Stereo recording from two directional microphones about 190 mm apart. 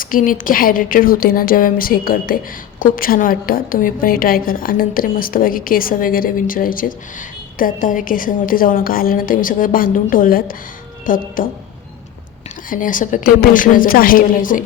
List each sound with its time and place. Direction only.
0.0 s a woman's voice: 45° left (ahead or behind)
12.7 s a woman's voice: 45° left (ahead or behind)